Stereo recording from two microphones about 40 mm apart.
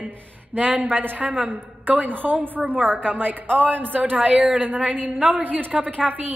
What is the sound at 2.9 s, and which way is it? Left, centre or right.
A woman's voice, right.